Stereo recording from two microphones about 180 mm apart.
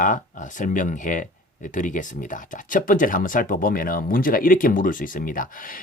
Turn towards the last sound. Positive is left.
turn(degrees=50)  # may be behind; listen again after turning